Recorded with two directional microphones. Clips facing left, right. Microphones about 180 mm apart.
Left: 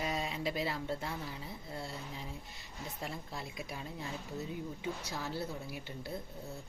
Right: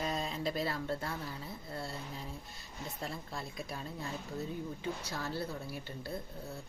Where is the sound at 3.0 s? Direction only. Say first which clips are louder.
Right 1 dB; 15° left (ahead or behind).